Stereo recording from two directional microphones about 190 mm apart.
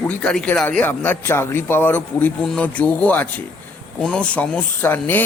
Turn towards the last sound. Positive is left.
turn(degrees=10)  # may be behind; listen again after turning